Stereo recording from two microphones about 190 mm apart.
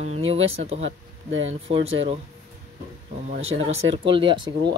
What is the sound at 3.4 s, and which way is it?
Speech, 90° right.